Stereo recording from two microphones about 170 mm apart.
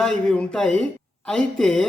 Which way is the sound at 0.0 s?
5° left (ahead or behind).